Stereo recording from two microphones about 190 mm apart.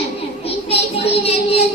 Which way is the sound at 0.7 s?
30° left (ahead or behind).